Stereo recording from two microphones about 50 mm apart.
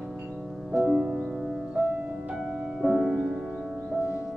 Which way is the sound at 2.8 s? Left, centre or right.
Centre.